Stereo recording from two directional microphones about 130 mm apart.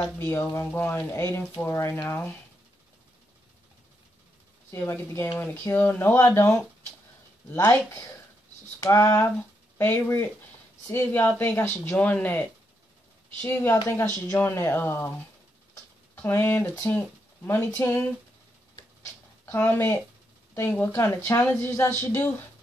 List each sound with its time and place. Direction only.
0.0 s speech: 15° left (ahead or behind)
4.6 s speech: 20° left (ahead or behind)
8.8 s speech: 20° left (ahead or behind)
15.7 s a sound: 15° left (ahead or behind)
17.5 s speech: 20° left (ahead or behind)
19.4 s speech: 15° left (ahead or behind)